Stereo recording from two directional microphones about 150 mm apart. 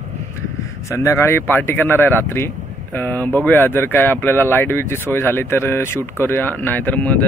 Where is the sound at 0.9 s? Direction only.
20° left (ahead or behind).